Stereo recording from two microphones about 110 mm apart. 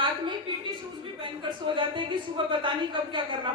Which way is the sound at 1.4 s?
50° right (ahead or behind).